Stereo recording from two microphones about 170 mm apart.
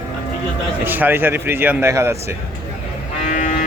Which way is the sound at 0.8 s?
10° right (ahead or behind).